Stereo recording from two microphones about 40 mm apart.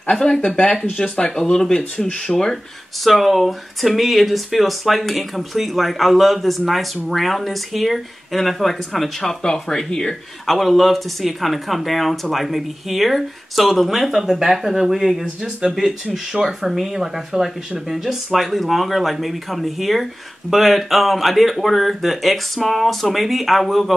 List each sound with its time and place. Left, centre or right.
0.1 s speech: centre
9.4 s speech: centre
10.4 s speech: centre